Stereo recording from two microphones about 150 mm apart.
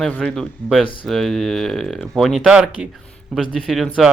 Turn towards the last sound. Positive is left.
turn(degrees=0)  # may be behind; listen again after turning